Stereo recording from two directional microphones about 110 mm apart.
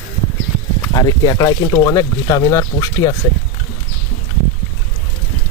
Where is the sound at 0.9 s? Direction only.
40° left (ahead or behind).